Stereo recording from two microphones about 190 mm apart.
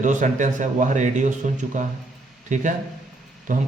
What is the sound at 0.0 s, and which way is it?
A man's voice, 40° right (ahead or behind).